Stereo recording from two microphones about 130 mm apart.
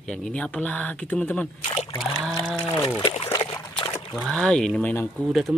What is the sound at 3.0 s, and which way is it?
Trickle, 50° left (ahead or behind).